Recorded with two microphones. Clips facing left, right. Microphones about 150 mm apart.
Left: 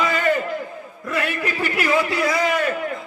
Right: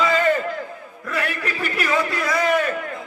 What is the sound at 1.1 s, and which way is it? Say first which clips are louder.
Speech: left 2 dB; 25° left (ahead or behind).